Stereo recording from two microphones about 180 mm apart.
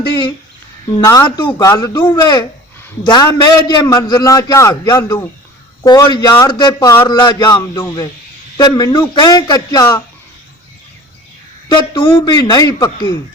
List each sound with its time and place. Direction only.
1.0 s a man's voice: 20° left (ahead or behind)
11.7 s a man's voice: 25° left (ahead or behind)